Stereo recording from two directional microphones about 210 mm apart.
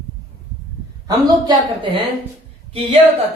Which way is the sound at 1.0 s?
20° right (ahead or behind).